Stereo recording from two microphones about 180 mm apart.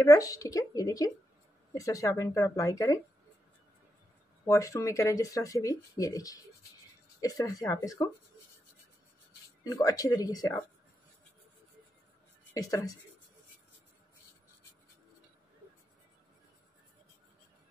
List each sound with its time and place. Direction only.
0.0 s speech: 20° left (ahead or behind)
4.5 s speech: 15° left (ahead or behind)
9.6 s speech: 20° left (ahead or behind)
12.5 s speech: 20° left (ahead or behind)